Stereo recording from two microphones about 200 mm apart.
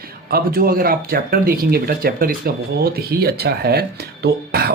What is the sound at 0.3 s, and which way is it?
Speech, 50° right (ahead or behind).